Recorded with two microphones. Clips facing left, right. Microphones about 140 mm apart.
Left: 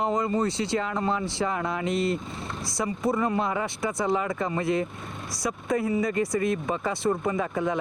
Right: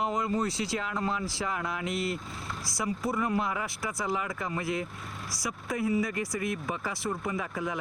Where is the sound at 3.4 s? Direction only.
30° left (ahead or behind).